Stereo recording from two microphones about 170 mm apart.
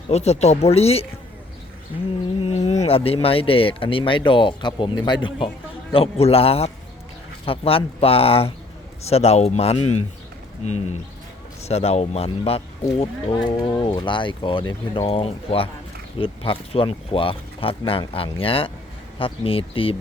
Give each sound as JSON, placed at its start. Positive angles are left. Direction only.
{"t": 0.1, "sound": "speech", "side_deg": 40}
{"t": 2.4, "sound": "speech", "side_deg": 40}
{"t": 11.6, "sound": "speech", "side_deg": 35}